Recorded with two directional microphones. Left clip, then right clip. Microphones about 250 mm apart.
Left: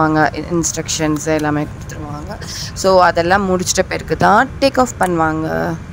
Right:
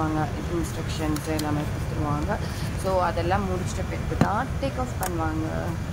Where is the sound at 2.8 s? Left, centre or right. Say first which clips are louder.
Left 14 dB; left.